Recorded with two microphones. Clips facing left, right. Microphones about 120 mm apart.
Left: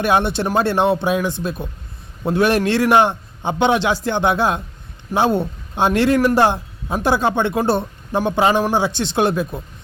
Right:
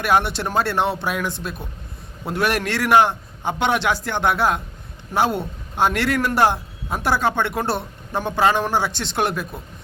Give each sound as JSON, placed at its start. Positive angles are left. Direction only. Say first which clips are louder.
{"t": 0.0, "sound": "a man's voice", "louder": "left 2 dB", "side_deg": 20}